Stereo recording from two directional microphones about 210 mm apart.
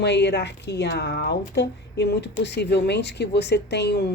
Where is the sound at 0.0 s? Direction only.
55° left (ahead or behind).